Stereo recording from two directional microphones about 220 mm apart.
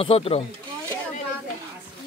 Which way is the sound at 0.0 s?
25° left (ahead or behind).